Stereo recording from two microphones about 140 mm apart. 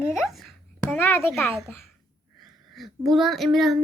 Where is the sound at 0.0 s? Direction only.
5° right (ahead or behind).